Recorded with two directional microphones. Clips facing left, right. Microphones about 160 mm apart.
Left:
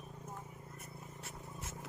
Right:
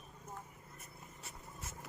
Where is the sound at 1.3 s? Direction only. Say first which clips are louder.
Left 2 dB; 25° left (ahead or behind).